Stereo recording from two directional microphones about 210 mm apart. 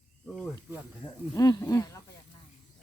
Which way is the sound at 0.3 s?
10° right (ahead or behind).